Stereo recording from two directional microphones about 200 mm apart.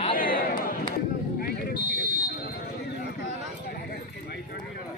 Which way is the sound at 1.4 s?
50° left (ahead or behind).